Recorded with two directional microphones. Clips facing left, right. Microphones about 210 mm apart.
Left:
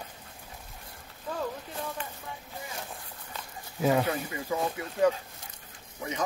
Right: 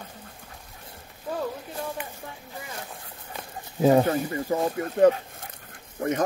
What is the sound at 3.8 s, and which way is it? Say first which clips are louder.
Speech: right 7 dB; 40° right (ahead or behind).